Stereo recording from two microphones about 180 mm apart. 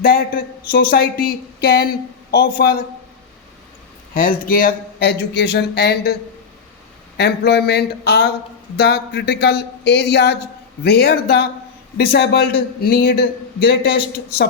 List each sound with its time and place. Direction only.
0.7 s a man's voice: 55° left (ahead or behind)
4.1 s speech: 50° left (ahead or behind)
7.2 s a man's voice: 65° left (ahead or behind)